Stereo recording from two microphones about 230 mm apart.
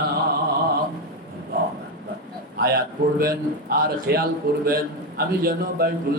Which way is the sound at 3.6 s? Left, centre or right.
Right.